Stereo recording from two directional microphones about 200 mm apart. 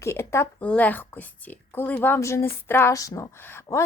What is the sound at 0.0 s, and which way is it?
A woman's voice, 15° left (ahead or behind).